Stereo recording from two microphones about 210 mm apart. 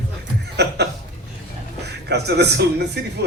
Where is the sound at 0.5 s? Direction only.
50° right (ahead or behind).